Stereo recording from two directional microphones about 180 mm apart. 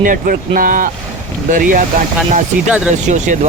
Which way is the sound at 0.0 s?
50° right (ahead or behind).